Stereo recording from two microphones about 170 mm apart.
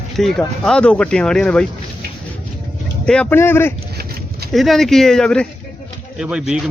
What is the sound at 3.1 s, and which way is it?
Speech, 10° left (ahead or behind).